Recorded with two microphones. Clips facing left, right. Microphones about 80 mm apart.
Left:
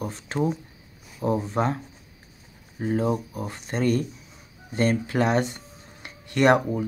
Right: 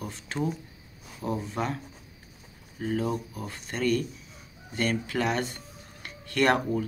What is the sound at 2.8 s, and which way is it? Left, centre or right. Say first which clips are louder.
Speech: left 4 dB; left.